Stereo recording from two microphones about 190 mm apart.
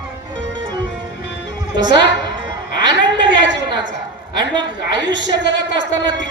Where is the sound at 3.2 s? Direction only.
70° right (ahead or behind).